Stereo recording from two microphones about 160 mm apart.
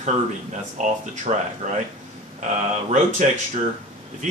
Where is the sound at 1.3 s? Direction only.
45° right (ahead or behind).